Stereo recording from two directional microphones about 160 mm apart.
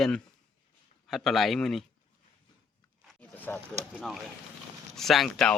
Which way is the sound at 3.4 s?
10° left (ahead or behind).